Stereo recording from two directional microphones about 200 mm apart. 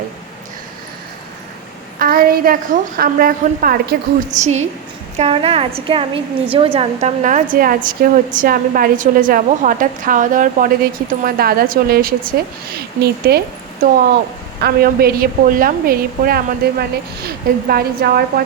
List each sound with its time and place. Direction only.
2.0 s a sound: 45° right (ahead or behind)
3.0 s a woman's voice: 45° right (ahead or behind)
4.4 s a woman's voice: 35° right (ahead or behind); by 13.4 s 50° right (ahead or behind)
14.6 s a woman's voice: 50° right (ahead or behind)